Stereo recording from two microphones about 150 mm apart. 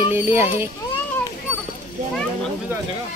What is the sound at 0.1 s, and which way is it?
Speech, 15° right (ahead or behind).